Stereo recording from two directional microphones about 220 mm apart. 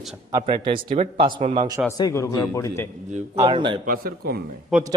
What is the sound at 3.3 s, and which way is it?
Speech, 20° right (ahead or behind).